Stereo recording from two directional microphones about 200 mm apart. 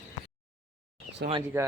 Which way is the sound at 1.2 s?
55° right (ahead or behind).